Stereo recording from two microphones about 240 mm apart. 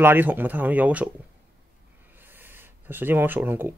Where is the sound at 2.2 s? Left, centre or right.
Centre.